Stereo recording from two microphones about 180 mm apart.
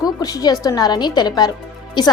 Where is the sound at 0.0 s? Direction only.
20° left (ahead or behind).